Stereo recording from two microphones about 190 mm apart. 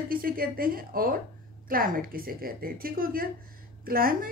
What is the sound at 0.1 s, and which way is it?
A woman's voice, 50° right (ahead or behind).